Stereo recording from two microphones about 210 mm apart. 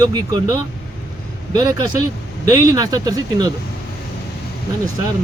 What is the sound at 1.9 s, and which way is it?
Vehicle, 90° left.